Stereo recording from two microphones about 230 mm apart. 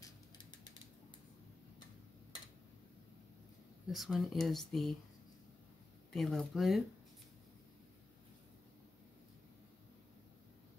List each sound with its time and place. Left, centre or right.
0.0 s mechanisms: centre
3.9 s speech: centre
6.1 s speech: centre